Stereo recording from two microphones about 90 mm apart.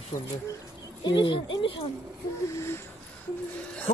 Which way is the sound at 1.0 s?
65° left (ahead or behind).